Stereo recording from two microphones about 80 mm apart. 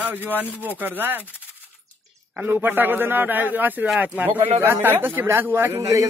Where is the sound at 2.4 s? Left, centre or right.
Right.